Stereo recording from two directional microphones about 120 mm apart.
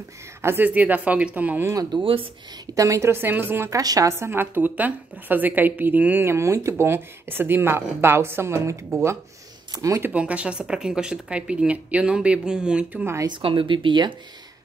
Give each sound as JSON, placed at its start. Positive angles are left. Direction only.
{"t": 0.4, "sound": "speech", "side_deg": -20}
{"t": 1.7, "sound": "speech", "side_deg": -35}
{"t": 2.6, "sound": "a woman's voice", "side_deg": -25}
{"t": 10.0, "sound": "speech", "side_deg": -10}
{"t": 13.0, "sound": "a woman's voice", "side_deg": -25}
{"t": 13.3, "sound": "speech", "side_deg": -45}